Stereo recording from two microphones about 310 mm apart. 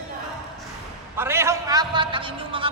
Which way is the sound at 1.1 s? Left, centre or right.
Centre.